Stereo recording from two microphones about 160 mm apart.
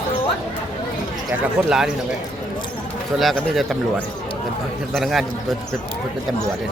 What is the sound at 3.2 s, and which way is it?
Speech, centre (ahead or behind).